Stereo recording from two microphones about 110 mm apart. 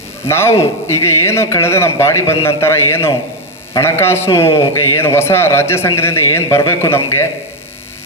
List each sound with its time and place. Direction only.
0.3 s a man's voice: 25° left (ahead or behind)